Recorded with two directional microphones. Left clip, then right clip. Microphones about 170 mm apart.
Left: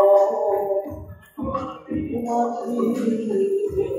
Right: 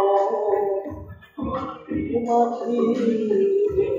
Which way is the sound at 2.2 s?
20° left (ahead or behind).